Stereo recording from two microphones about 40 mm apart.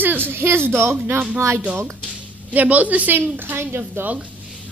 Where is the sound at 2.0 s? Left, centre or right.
Left.